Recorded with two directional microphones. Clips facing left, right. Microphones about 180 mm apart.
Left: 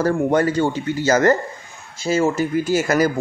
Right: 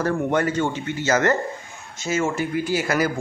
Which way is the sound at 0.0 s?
35° left (ahead or behind).